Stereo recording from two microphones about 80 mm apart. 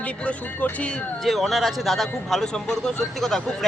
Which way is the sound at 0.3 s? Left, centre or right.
Centre.